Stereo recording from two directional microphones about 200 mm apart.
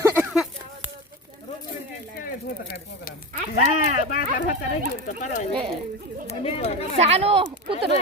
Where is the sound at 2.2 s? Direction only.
50° left (ahead or behind); by 7.0 s 30° left (ahead or behind).